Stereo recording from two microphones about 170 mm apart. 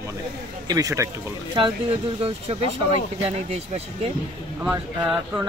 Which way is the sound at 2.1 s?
35° right (ahead or behind).